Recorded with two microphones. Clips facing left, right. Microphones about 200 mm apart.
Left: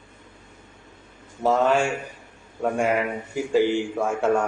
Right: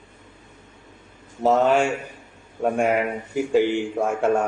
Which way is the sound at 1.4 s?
20° right (ahead or behind).